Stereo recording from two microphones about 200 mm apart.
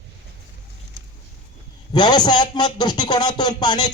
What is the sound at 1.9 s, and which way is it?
A man's voice, 20° left (ahead or behind).